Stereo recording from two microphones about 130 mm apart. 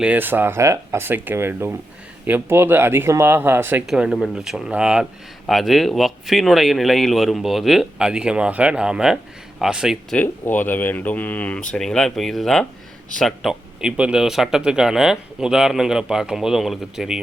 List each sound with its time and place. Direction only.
0.0 s speech: 15° right (ahead or behind)
3.8 s a man's voice: 5° right (ahead or behind)
10.2 s a man's voice: 15° left (ahead or behind); by 17.2 s 5° right (ahead or behind)